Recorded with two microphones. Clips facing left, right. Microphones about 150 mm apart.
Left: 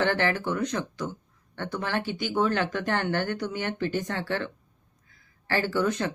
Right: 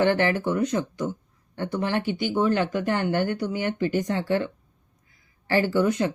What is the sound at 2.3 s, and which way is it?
Speech, 15° right (ahead or behind).